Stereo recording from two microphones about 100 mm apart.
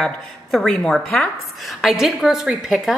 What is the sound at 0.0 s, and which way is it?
A woman's voice, centre (ahead or behind).